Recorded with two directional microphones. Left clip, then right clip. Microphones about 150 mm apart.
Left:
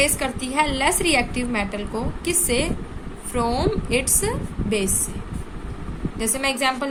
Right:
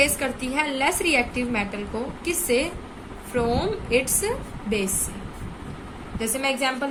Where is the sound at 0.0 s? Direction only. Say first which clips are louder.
Left 1 dB; 40° left (ahead or behind).